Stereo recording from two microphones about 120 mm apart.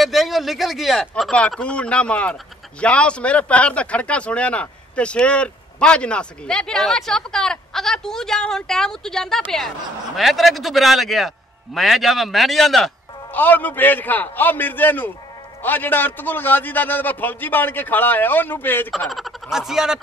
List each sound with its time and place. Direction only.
0.0 s a man's voice: centre (ahead or behind)
13.3 s a man's voice: 15° left (ahead or behind)
18.9 s a man's voice: centre (ahead or behind)